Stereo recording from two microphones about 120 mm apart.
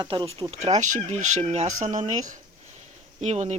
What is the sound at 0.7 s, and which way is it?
Speech, 85° right.